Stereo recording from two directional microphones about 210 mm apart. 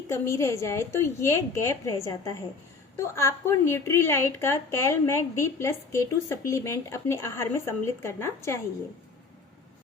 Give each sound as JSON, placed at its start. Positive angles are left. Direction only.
{"t": 0.1, "sound": "a woman's voice", "side_deg": 15}